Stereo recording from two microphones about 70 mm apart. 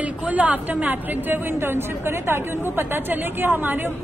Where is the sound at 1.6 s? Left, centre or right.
Right.